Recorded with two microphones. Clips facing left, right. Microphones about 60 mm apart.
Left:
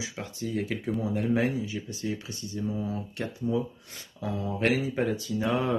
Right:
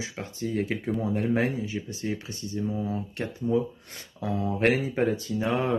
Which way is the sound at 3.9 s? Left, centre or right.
Right.